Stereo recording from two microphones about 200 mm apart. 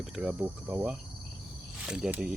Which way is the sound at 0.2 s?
5° right (ahead or behind).